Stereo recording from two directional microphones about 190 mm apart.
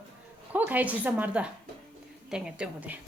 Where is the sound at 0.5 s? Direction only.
10° right (ahead or behind).